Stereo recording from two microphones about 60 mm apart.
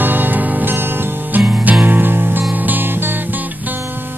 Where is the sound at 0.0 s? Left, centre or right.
Right.